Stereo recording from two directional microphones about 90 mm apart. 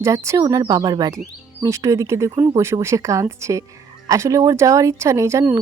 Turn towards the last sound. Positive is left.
turn(degrees=-35)  # may be behind; listen again after turning